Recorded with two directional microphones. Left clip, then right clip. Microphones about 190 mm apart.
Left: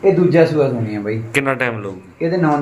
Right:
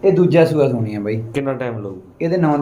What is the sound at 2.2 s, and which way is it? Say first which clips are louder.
Speech: even; 25° right (ahead or behind).